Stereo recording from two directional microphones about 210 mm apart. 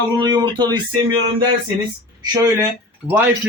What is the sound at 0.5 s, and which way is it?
Speech, 20° right (ahead or behind).